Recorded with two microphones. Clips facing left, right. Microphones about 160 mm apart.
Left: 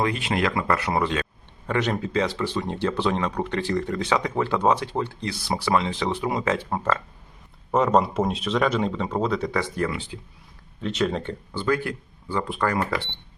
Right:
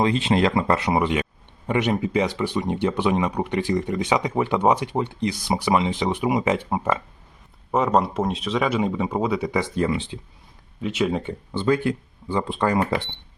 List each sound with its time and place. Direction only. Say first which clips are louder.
0.0 s speech: right 4 dB; 25° right (ahead or behind)
7.7 s speech: even; centre (ahead or behind); by 10.2 s 25° right (ahead or behind)
10.8 s speech: right 2 dB; 10° right (ahead or behind)
11.5 s speech: right 4 dB; 25° right (ahead or behind)